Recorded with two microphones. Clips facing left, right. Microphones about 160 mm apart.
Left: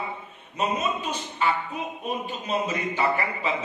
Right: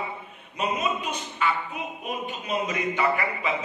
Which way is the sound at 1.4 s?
35° left (ahead or behind).